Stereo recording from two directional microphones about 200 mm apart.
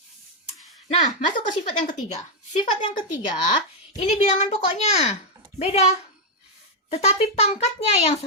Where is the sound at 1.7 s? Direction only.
40° left (ahead or behind).